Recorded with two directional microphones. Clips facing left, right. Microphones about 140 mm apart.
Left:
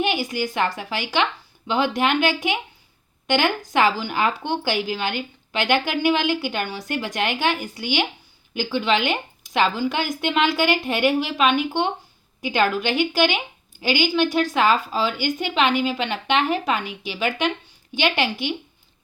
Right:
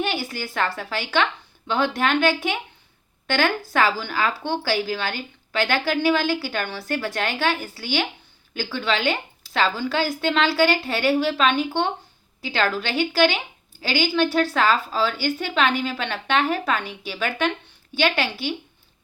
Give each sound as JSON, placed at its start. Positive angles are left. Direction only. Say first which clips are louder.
{"t": 0.0, "sound": "a woman's voice", "louder": "left 3 dB", "side_deg": 15}